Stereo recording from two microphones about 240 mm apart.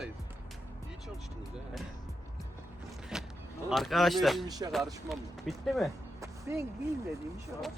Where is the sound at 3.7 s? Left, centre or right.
Centre.